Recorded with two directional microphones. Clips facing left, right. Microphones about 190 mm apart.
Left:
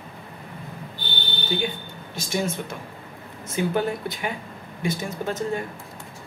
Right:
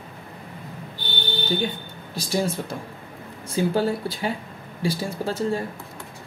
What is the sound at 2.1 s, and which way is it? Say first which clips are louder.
Speech: right 2 dB; 35° right (ahead or behind).